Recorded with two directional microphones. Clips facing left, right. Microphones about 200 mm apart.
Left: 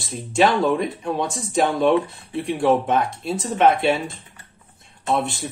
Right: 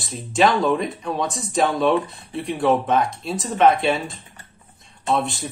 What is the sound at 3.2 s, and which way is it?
Speech, 10° left (ahead or behind).